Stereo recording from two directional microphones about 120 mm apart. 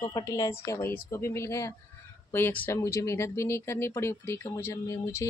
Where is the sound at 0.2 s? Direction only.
25° left (ahead or behind).